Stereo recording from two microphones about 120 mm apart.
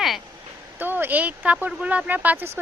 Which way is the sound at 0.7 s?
15° right (ahead or behind).